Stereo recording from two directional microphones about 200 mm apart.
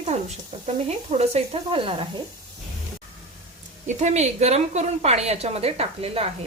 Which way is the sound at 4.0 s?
35° right (ahead or behind).